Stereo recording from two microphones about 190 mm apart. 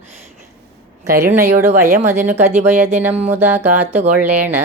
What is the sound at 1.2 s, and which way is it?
Music, 15° right (ahead or behind).